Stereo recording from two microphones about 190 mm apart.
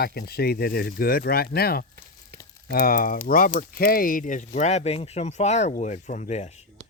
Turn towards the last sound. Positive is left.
turn(degrees=35)  # may be behind; listen again after turning